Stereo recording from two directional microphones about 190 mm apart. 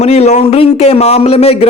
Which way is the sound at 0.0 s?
35° left (ahead or behind).